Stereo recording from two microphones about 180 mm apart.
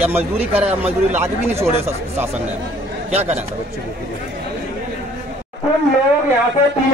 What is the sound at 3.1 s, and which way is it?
Speech, 35° right (ahead or behind).